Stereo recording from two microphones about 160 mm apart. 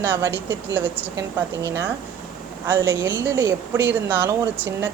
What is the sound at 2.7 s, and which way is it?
Speech, 25° right (ahead or behind).